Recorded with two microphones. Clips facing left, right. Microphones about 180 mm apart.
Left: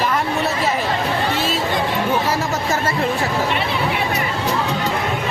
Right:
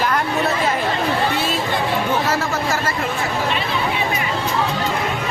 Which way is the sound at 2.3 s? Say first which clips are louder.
Even; 20° left (ahead or behind).